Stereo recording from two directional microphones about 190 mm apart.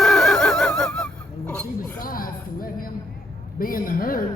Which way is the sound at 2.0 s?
50° left (ahead or behind).